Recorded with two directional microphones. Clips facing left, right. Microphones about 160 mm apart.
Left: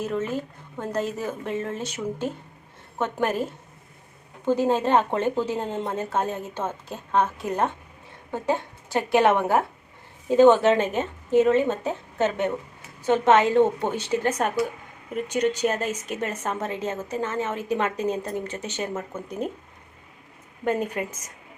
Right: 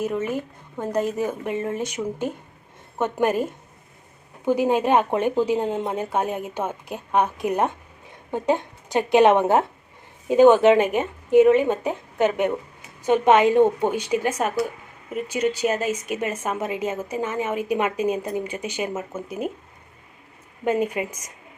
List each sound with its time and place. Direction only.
0.0 s a woman's voice: 10° right (ahead or behind)
4.4 s a woman's voice: 10° right (ahead or behind)
20.7 s a woman's voice: 10° right (ahead or behind)